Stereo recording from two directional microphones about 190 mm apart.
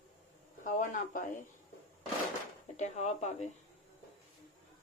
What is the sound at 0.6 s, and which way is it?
Speech, 45° left (ahead or behind).